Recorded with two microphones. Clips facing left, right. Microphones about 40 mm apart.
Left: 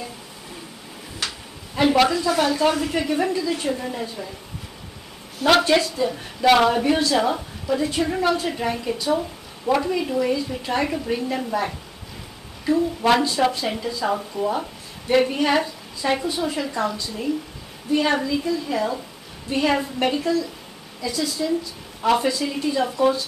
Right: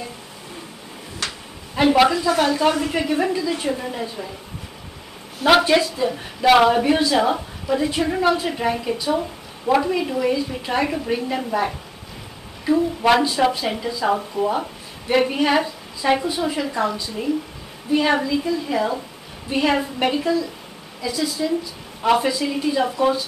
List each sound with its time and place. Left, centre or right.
1.8 s speech: centre
5.4 s speech: centre
13.1 s speech: centre
17.9 s speech: centre